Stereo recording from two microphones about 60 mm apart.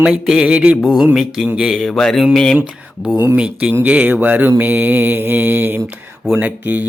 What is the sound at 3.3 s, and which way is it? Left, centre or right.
Speech, right.